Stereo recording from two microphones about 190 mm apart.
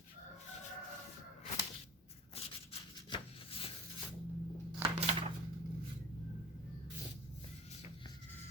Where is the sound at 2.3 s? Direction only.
30° left (ahead or behind).